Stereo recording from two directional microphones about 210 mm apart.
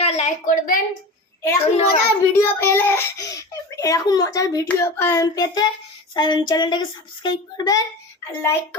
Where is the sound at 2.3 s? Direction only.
10° left (ahead or behind).